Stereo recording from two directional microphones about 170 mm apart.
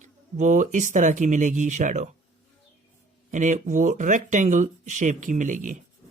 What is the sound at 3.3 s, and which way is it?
Speech, 45° right (ahead or behind).